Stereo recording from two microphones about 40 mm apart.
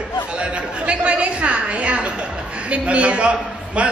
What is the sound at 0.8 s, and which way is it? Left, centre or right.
A woman's voice, right.